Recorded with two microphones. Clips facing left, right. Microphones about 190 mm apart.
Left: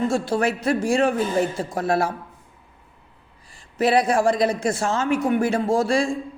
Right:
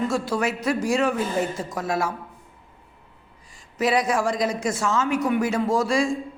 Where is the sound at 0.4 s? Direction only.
30° left (ahead or behind).